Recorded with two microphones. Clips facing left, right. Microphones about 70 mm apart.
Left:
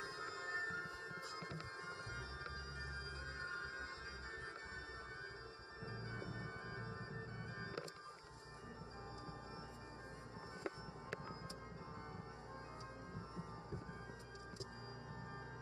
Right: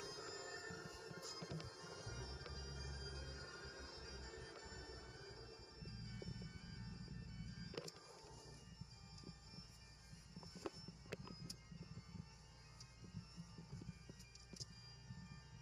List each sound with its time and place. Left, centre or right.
0.0 s music: left